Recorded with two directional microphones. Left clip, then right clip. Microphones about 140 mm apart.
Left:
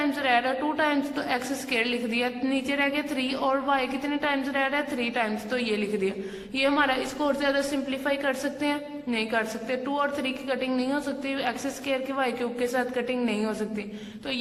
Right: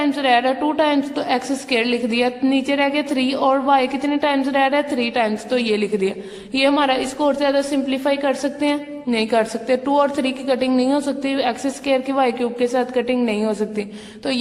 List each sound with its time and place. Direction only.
0.0 s a woman's voice: 25° right (ahead or behind)